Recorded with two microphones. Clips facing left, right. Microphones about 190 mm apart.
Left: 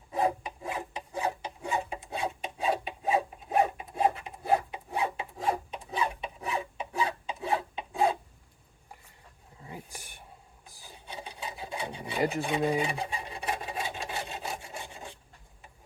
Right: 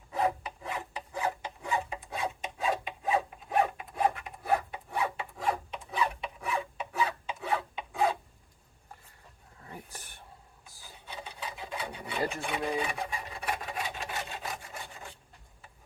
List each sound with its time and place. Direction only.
0.1 s filing: 20° left (ahead or behind)
9.6 s a sound: 15° left (ahead or behind)
10.8 s filing: 15° left (ahead or behind)